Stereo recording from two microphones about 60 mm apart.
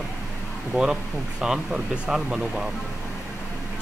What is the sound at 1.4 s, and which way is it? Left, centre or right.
Speech, centre.